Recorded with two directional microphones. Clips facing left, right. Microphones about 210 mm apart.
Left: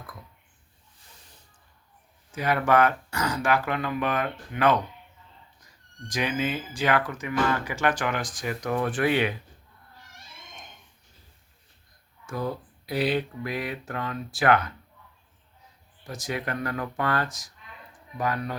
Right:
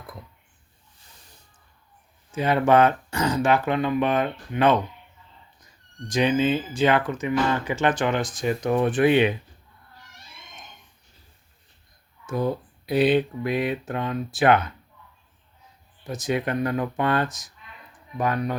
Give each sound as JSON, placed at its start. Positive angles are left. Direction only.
{"t": 2.3, "sound": "speech", "side_deg": -25}
{"t": 12.2, "sound": "speech", "side_deg": -20}
{"t": 16.0, "sound": "speech", "side_deg": -20}